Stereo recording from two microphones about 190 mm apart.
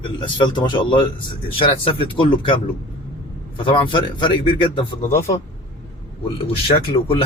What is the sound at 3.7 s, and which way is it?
A man's voice, 25° left (ahead or behind).